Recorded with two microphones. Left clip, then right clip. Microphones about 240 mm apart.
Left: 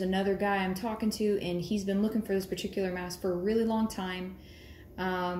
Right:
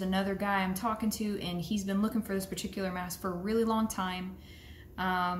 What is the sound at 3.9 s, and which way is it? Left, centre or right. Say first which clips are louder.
Speech: right 2 dB; right.